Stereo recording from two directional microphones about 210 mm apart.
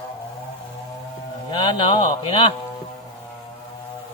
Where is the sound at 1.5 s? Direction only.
20° left (ahead or behind).